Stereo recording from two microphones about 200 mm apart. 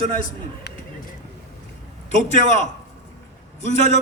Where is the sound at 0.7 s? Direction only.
55° left (ahead or behind).